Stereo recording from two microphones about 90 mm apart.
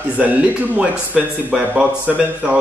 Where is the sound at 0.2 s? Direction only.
15° right (ahead or behind).